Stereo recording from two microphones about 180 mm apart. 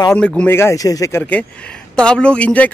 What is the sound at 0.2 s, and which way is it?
Speech, 5° left (ahead or behind).